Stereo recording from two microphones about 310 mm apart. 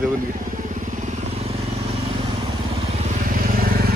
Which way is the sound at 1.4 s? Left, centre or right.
Centre.